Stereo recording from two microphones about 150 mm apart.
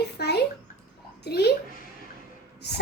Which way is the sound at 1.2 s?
90° left.